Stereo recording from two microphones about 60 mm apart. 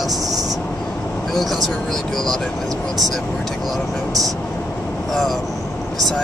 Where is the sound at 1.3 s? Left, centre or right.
Centre.